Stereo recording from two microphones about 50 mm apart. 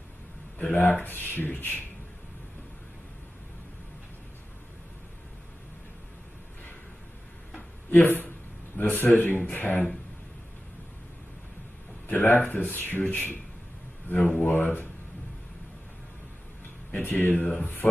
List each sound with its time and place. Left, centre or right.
0.6 s speech: left
7.9 s speech: left
12.1 s a man's voice: left
16.9 s speech: left